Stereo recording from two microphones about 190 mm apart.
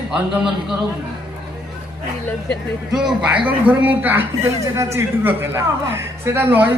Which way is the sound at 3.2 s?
5° right (ahead or behind).